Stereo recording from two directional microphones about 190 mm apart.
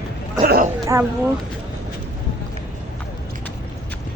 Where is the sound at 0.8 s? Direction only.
15° right (ahead or behind).